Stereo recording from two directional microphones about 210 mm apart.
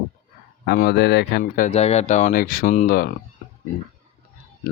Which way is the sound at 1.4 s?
35° left (ahead or behind).